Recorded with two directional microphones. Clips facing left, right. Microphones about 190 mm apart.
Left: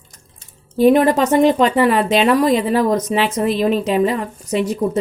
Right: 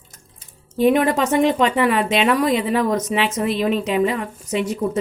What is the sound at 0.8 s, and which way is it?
Speech, 35° left (ahead or behind).